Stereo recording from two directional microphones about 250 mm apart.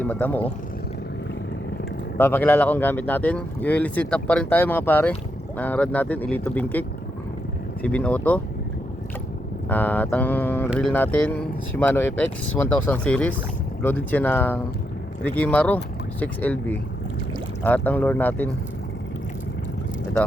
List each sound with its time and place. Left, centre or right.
0.0 s speech: centre
2.1 s speech: centre
9.6 s speech: centre